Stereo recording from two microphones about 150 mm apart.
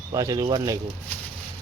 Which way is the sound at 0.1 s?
25° right (ahead or behind).